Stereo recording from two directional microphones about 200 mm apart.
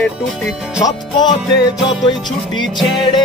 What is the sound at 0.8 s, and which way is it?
Music, 20° left (ahead or behind).